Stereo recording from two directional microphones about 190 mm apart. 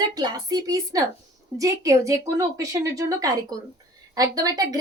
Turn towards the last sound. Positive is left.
turn(degrees=-20)  # may be behind; listen again after turning